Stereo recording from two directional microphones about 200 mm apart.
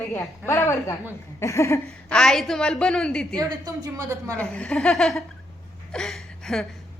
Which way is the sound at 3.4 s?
15° right (ahead or behind).